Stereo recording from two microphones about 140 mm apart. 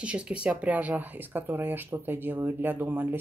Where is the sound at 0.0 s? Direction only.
10° right (ahead or behind).